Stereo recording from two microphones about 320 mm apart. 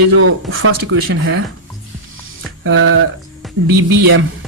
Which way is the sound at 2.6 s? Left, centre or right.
Right.